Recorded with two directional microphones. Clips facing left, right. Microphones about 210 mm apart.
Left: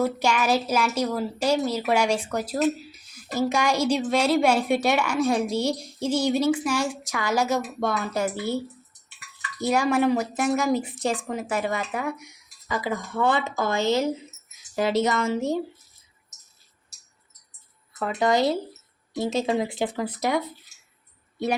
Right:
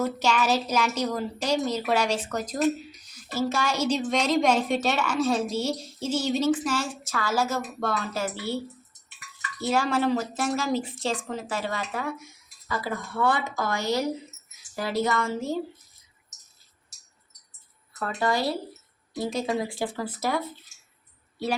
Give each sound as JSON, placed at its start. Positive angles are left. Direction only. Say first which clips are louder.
{"t": 0.0, "sound": "a woman's voice", "louder": "left 2 dB", "side_deg": 10}
{"t": 9.6, "sound": "a woman's voice", "louder": "left 3 dB", "side_deg": 15}
{"t": 18.0, "sound": "speech", "louder": "left 4 dB", "side_deg": 20}